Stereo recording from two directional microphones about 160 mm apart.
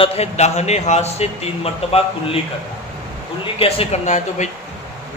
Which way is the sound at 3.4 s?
35° left (ahead or behind).